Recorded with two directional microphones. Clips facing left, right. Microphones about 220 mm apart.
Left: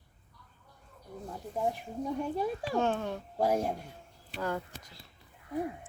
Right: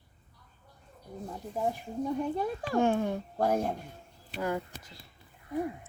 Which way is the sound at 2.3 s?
5° left (ahead or behind).